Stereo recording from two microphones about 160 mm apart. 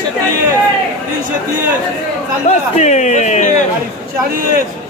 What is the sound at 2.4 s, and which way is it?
Speech, 45° left (ahead or behind).